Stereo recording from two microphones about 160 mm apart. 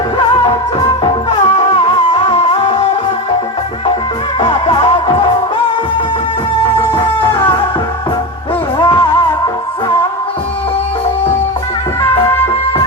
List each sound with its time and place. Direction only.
1.0 s music: 40° left (ahead or behind)
4.4 s music: 35° left (ahead or behind)
6.9 s music: 30° left (ahead or behind)
8.8 s music: 30° left (ahead or behind)